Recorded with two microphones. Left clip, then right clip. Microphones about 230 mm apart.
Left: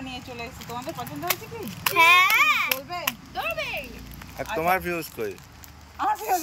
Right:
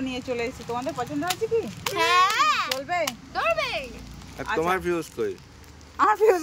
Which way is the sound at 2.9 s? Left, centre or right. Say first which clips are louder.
Right 4 dB; centre.